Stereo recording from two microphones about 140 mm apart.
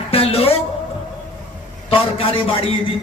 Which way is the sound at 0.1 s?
45° left (ahead or behind).